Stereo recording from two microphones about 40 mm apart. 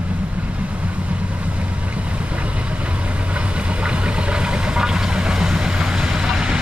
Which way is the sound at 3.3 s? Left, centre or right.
Right.